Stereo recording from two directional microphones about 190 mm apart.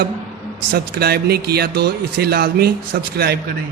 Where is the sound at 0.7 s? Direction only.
55° right (ahead or behind).